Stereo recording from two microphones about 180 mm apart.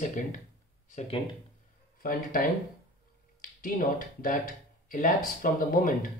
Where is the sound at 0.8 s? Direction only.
40° left (ahead or behind).